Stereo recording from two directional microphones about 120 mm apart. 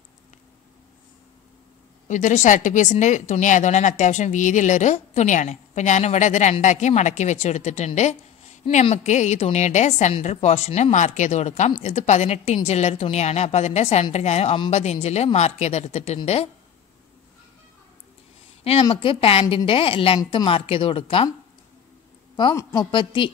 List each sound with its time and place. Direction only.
2.0 s a woman's voice: 90° left
10.2 s a woman's voice: 65° left (ahead or behind)
18.6 s a woman's voice: 55° left (ahead or behind)
22.6 s a woman's voice: 25° left (ahead or behind)
22.8 s speech: 45° left (ahead or behind)